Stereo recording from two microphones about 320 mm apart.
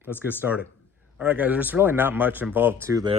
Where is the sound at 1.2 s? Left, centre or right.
Centre.